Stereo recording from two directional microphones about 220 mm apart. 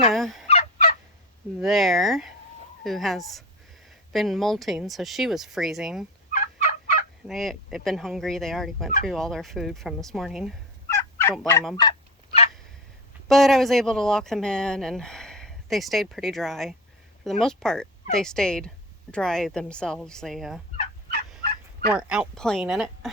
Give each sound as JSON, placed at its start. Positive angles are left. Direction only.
{"t": 0.1, "sound": "fowl", "side_deg": 0}
{"t": 0.4, "sound": "fowl", "side_deg": 30}
{"t": 1.5, "sound": "speech", "side_deg": 0}
{"t": 6.3, "sound": "turkey", "side_deg": 40}
{"t": 7.3, "sound": "speech", "side_deg": 0}
{"t": 10.8, "sound": "fowl", "side_deg": 15}
{"t": 11.8, "sound": "fowl", "side_deg": 25}
{"t": 13.2, "sound": "speech", "side_deg": 0}
{"t": 21.4, "sound": "fowl", "side_deg": -45}
{"t": 21.9, "sound": "speech", "side_deg": -5}